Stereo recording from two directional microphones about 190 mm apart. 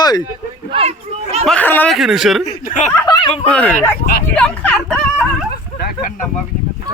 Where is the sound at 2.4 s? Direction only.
40° left (ahead or behind).